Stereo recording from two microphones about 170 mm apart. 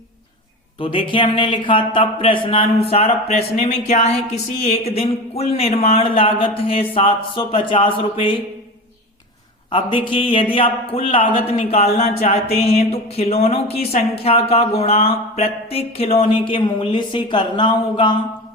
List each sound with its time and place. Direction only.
0.8 s a man's voice: 30° left (ahead or behind)
9.7 s a man's voice: 30° left (ahead or behind)